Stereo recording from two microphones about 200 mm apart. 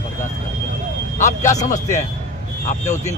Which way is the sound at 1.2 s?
15° left (ahead or behind).